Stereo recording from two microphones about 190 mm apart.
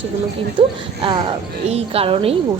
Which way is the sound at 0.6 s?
30° right (ahead or behind).